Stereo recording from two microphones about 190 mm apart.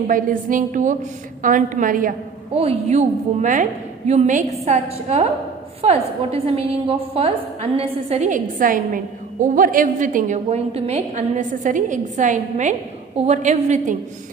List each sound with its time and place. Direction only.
0.1 s a woman's voice: 45° right (ahead or behind)
2.6 s a woman's voice: 35° right (ahead or behind)